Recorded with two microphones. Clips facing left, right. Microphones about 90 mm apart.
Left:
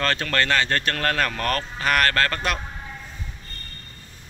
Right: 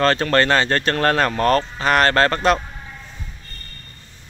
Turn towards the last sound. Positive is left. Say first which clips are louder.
# right 7 dB
turn(degrees=-30)  # may be behind; listen again after turning